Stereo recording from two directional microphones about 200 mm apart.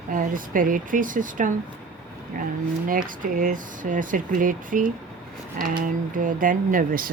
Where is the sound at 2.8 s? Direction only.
45° right (ahead or behind).